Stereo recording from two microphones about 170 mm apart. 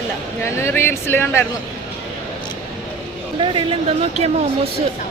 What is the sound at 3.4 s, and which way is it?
Speech, 30° right (ahead or behind).